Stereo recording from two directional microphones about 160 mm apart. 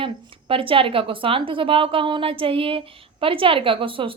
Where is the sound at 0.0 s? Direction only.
35° right (ahead or behind).